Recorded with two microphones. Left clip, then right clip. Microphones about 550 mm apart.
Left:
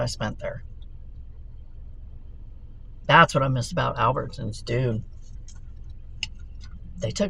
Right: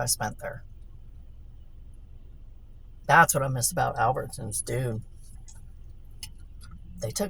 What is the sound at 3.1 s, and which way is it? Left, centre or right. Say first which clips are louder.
Speech: left 3 dB; right.